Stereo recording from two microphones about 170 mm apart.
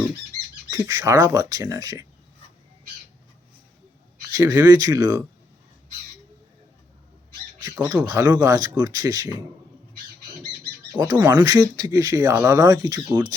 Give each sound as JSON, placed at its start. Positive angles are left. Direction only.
{"t": 0.7, "sound": "speech", "side_deg": -20}
{"t": 4.3, "sound": "speech", "side_deg": -20}
{"t": 7.6, "sound": "speech", "side_deg": -10}
{"t": 8.2, "sound": "speech", "side_deg": -20}
{"t": 11.1, "sound": "speech", "side_deg": -20}